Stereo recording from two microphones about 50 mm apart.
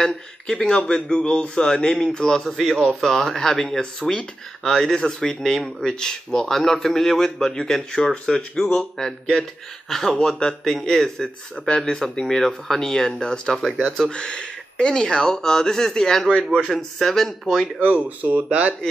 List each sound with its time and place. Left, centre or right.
0.0 s speech: centre
4.0 s speech: centre
4.6 s speech: centre
11.5 s speech: centre
17.7 s speech: right